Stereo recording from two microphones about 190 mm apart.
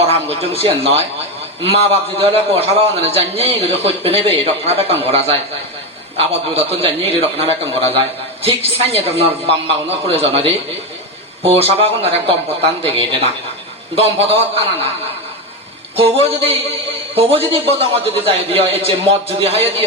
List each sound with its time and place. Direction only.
0.6 s a man's voice: 30° right (ahead or behind)
16.0 s a man's voice: 30° right (ahead or behind)